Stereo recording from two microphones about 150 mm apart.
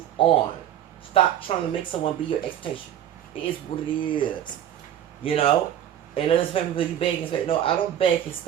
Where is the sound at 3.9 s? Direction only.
35° left (ahead or behind).